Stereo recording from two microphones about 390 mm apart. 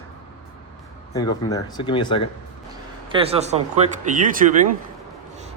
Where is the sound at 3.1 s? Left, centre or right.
Centre.